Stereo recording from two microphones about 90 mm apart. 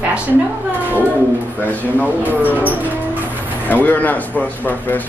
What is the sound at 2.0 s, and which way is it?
Speech, 20° right (ahead or behind).